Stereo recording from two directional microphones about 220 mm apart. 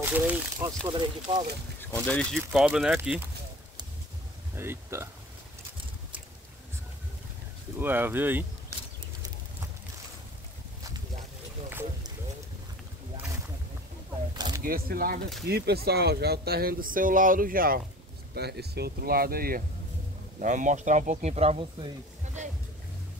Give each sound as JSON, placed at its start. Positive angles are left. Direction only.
{"t": 0.0, "sound": "speech", "side_deg": -10}
{"t": 1.8, "sound": "speech", "side_deg": 5}
{"t": 4.6, "sound": "speech", "side_deg": -10}
{"t": 7.8, "sound": "speech", "side_deg": -10}
{"t": 14.3, "sound": "a sound", "side_deg": -20}
{"t": 14.6, "sound": "speech", "side_deg": -40}